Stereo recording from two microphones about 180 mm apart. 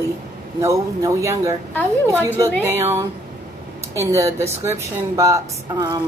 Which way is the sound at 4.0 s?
15° right (ahead or behind).